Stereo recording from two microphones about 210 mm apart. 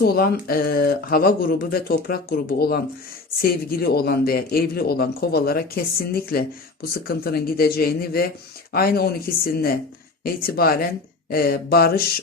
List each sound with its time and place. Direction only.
0.0 s speech: 45° left (ahead or behind)